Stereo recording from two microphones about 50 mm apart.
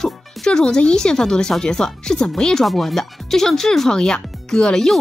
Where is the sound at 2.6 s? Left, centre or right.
Centre.